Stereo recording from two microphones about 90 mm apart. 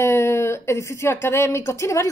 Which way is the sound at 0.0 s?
30° left (ahead or behind).